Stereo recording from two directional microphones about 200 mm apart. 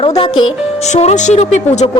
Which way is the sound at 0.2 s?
25° left (ahead or behind).